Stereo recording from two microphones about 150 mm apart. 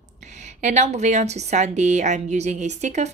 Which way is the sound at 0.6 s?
50° right (ahead or behind).